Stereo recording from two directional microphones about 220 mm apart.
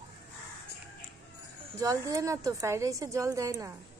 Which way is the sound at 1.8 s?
15° right (ahead or behind).